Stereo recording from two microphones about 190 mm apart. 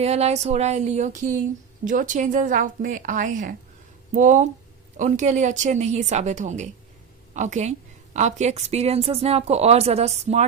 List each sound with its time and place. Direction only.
0.0 s a woman's voice: 35° right (ahead or behind)